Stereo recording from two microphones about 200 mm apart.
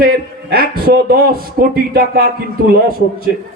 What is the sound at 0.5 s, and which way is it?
A man's voice, 50° right (ahead or behind).